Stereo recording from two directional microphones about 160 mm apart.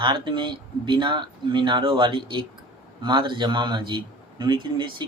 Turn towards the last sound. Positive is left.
turn(degrees=-30)  # may be behind; listen again after turning